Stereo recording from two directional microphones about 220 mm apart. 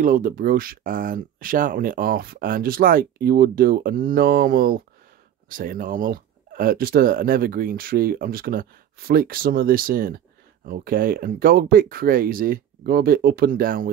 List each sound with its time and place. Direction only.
0.0 s speech: 40° right (ahead or behind)